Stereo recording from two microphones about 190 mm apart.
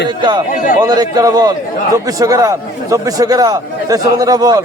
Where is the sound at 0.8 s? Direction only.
20° right (ahead or behind).